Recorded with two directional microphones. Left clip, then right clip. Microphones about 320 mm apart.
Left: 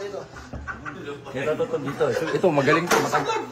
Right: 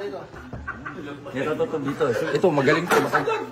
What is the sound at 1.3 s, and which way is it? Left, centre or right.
A man's voice, centre.